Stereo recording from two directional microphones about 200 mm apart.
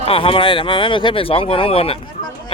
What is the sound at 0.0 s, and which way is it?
Speech, 25° left (ahead or behind).